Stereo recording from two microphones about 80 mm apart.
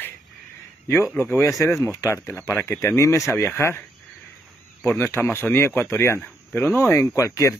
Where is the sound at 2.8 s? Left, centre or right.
Left.